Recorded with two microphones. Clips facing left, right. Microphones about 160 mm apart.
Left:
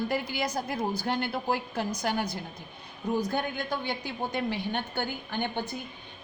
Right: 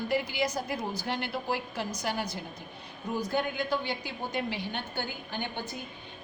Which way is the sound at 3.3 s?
50° left (ahead or behind).